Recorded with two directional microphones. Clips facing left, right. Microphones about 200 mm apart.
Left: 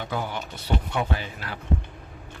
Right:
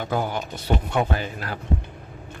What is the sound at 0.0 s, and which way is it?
Speech, 45° right (ahead or behind).